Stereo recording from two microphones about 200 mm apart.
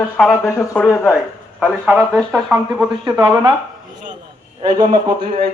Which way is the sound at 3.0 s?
20° right (ahead or behind).